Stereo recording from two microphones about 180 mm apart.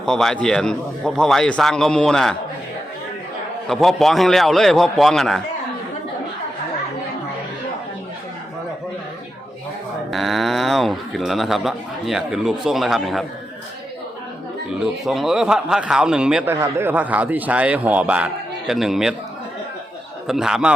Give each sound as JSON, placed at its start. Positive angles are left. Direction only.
{"t": 0.0, "sound": "speech", "side_deg": 0}
{"t": 3.7, "sound": "speech", "side_deg": 0}
{"t": 10.1, "sound": "speech", "side_deg": 0}
{"t": 15.0, "sound": "a man's voice", "side_deg": 0}
{"t": 20.2, "sound": "speech", "side_deg": -5}